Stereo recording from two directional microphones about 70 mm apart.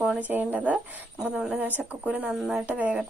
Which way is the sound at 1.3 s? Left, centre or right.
Centre.